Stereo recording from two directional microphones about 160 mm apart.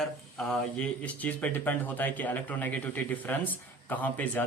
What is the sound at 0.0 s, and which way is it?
Speech, centre (ahead or behind).